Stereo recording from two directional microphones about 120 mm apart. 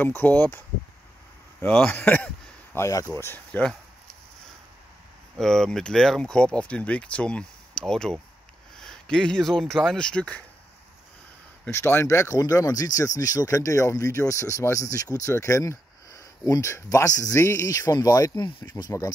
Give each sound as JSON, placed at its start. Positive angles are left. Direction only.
{"t": 0.0, "sound": "speech", "side_deg": 15}
{"t": 1.6, "sound": "speech", "side_deg": 10}
{"t": 5.4, "sound": "speech", "side_deg": 5}
{"t": 11.7, "sound": "speech", "side_deg": 20}